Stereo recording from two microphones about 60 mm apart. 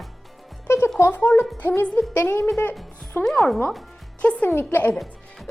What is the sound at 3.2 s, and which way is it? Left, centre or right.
Speech, centre.